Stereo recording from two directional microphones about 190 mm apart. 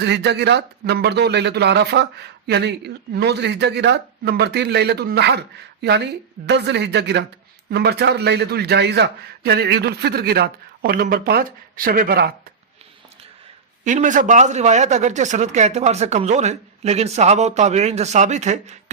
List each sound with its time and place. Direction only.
0.0 s speech: 65° right (ahead or behind)
13.8 s speech: 40° right (ahead or behind)